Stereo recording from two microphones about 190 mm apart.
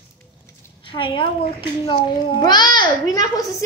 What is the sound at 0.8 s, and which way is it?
A child's voice, 25° left (ahead or behind).